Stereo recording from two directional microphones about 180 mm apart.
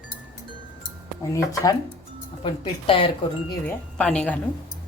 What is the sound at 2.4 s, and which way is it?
Speech, 30° left (ahead or behind).